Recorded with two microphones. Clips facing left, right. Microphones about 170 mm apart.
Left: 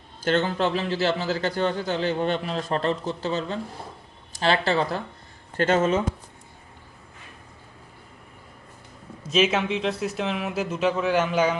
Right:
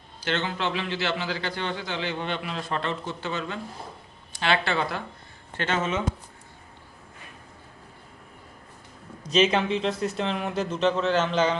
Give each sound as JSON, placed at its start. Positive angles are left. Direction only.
{"t": 0.3, "sound": "a man's voice", "side_deg": 45}
{"t": 9.3, "sound": "a man's voice", "side_deg": 5}